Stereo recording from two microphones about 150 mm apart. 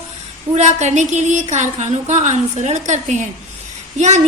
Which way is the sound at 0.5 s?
50° right (ahead or behind).